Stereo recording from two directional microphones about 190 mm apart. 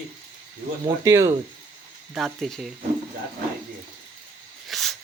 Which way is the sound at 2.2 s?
Centre (ahead or behind).